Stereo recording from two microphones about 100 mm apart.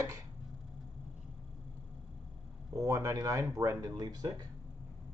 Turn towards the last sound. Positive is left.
turn(degrees=-40)  # may be behind; listen again after turning